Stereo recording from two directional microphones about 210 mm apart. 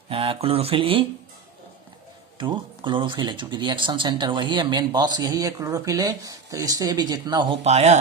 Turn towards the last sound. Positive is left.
turn(degrees=-30)  # may be behind; listen again after turning